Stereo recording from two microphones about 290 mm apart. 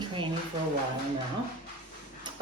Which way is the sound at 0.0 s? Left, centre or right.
Centre.